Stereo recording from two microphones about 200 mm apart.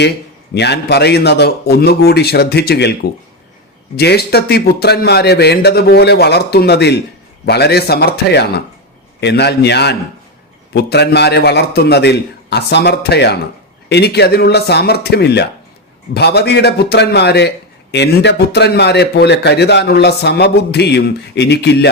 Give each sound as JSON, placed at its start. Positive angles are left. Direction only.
{"t": 0.5, "sound": "a man's voice", "side_deg": 55}